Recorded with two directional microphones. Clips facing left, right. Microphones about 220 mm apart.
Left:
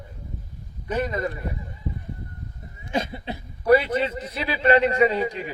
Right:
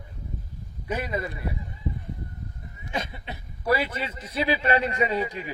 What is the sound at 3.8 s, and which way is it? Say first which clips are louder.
A man's voice: left 9 dB; 30° left (ahead or behind).